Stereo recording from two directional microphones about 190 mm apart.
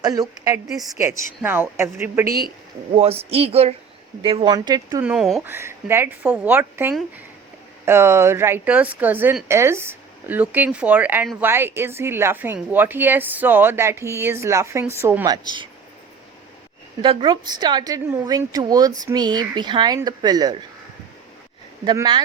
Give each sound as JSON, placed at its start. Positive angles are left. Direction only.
{"t": 0.0, "sound": "a woman's voice", "side_deg": -20}
{"t": 2.9, "sound": "a woman's voice", "side_deg": -30}
{"t": 5.0, "sound": "a woman's voice", "side_deg": -5}
{"t": 17.0, "sound": "a woman's voice", "side_deg": -25}
{"t": 21.8, "sound": "a woman's voice", "side_deg": -25}